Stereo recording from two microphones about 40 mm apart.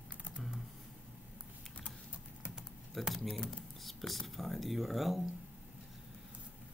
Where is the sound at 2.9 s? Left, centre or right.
Centre.